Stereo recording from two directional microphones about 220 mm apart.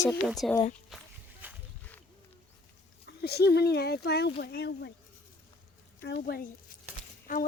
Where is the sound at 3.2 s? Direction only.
45° left (ahead or behind).